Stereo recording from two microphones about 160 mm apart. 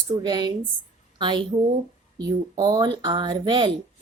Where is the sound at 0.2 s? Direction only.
25° right (ahead or behind).